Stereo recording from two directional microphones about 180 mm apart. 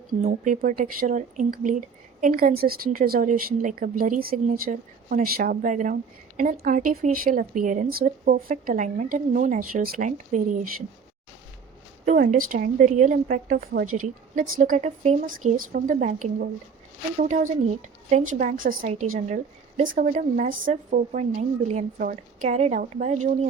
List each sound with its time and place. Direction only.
0.1 s a woman's voice: 50° right (ahead or behind)
12.0 s a woman's voice: 45° right (ahead or behind)
14.6 s a woman's voice: 45° right (ahead or behind)